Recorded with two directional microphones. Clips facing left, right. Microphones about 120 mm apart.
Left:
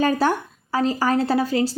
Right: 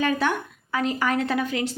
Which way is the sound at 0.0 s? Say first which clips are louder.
Left 4 dB; 35° left (ahead or behind).